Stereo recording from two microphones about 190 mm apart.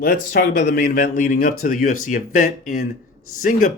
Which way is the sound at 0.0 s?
45° left (ahead or behind).